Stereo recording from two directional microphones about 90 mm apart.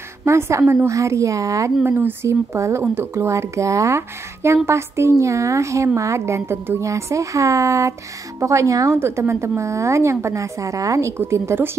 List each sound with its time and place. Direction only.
0.2 s a woman's voice: 30° right (ahead or behind)
1.8 s a woman's voice: 25° right (ahead or behind)